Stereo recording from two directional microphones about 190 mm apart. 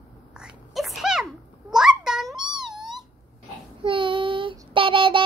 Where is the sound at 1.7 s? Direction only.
5° right (ahead or behind).